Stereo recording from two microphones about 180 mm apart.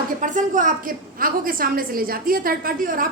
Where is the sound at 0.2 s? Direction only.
45° right (ahead or behind).